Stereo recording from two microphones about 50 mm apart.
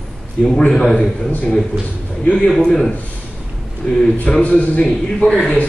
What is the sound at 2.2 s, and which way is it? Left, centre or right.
Speech, left.